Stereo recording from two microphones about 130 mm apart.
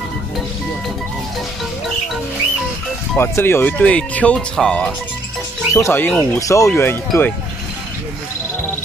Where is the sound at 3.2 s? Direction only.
20° left (ahead or behind).